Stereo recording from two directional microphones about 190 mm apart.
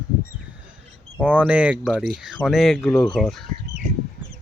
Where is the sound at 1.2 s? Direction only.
5° right (ahead or behind).